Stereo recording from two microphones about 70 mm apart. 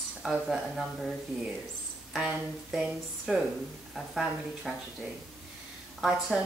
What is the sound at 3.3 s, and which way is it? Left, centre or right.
A woman's voice, centre.